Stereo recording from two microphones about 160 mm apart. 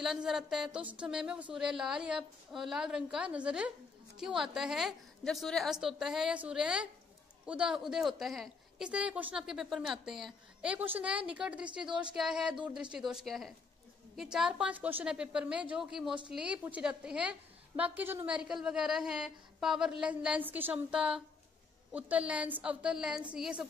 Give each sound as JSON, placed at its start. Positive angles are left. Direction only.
{"t": 0.0, "sound": "a woman's voice", "side_deg": 0}